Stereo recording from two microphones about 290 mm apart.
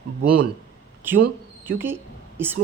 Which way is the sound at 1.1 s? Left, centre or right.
Centre.